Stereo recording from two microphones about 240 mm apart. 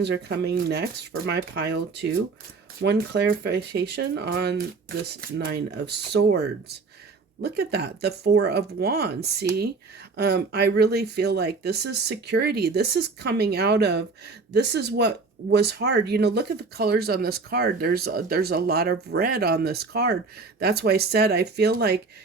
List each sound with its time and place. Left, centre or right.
0.0 s speech: right